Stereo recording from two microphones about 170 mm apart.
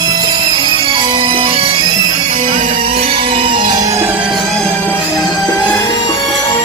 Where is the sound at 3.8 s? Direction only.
15° right (ahead or behind).